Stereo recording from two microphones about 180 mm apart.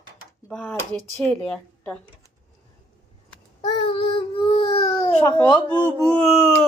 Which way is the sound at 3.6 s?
25° left (ahead or behind).